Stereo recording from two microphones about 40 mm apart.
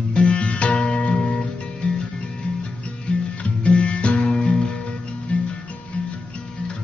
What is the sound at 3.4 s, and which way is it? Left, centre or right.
Music, left.